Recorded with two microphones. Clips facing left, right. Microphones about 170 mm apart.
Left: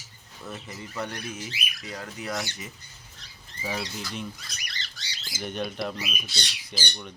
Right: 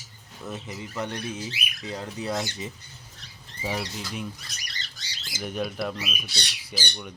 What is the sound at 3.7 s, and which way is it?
Speech, centre (ahead or behind).